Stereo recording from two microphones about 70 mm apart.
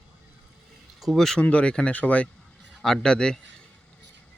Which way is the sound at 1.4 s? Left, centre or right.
Centre.